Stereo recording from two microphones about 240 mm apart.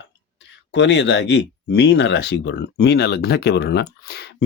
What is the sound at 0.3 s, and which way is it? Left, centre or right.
Speech, left.